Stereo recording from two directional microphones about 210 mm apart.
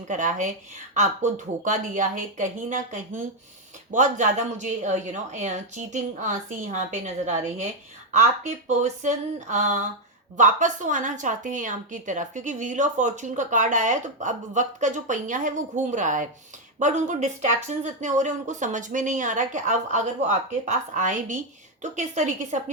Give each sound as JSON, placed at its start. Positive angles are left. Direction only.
{"t": 0.1, "sound": "speech", "side_deg": -40}